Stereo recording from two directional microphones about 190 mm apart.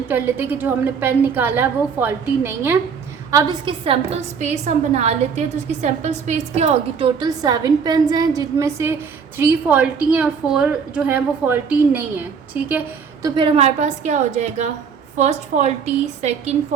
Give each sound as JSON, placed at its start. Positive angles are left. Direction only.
{"t": 0.1, "sound": "a woman's voice", "side_deg": -10}
{"t": 3.3, "sound": "a woman's voice", "side_deg": -30}
{"t": 7.2, "sound": "a woman's voice", "side_deg": -20}
{"t": 13.2, "sound": "a woman's voice", "side_deg": -25}